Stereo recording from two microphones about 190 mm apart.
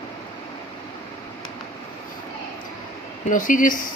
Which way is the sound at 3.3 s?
45° left (ahead or behind).